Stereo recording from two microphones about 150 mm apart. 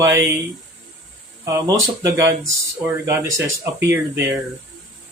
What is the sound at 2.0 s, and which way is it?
Speech, 20° right (ahead or behind).